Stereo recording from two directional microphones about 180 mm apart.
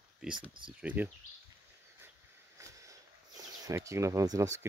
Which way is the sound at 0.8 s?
10° right (ahead or behind).